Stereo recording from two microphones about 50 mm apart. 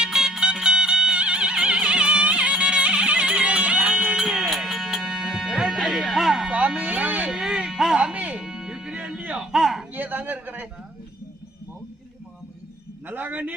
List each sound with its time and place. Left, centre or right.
0.0 s music: centre
4.2 s music: centre
6.5 s a sound: right
7.3 s music: centre
8.4 s music: centre
9.0 s a sound: right
9.5 s a sound: centre
9.9 s a man's voice: right
13.1 s a man's voice: right